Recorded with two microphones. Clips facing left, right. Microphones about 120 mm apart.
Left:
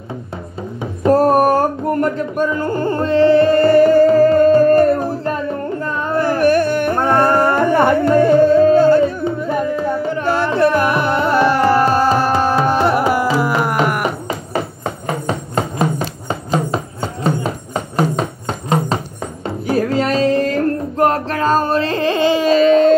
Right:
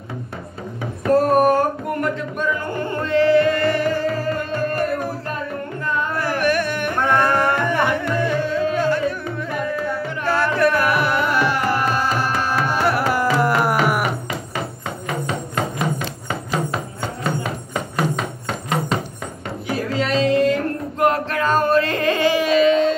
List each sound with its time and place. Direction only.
1.0 s music: 35° left (ahead or behind)
5.9 s a sound: 30° left (ahead or behind)
13.4 s music: centre (ahead or behind)
15.0 s music: 35° left (ahead or behind)
19.7 s music: 40° left (ahead or behind)